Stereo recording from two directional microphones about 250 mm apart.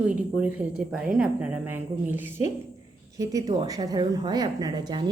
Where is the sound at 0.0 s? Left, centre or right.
Centre.